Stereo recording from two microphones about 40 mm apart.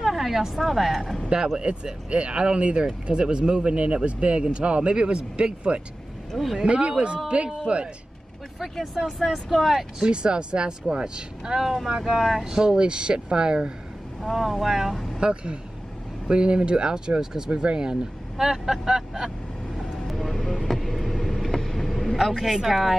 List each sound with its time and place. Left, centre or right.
0.0 s speech: centre
1.6 s speech: right
6.3 s speech: centre
6.6 s speech: right
9.2 s speech: centre
9.9 s speech: right
12.4 s speech: centre
14.3 s speech: centre
15.1 s speech: right
18.4 s speech: centre
19.9 s vehicle: centre
21.5 s vehicle: centre
21.7 s vehicle: centre
22.3 s speech: centre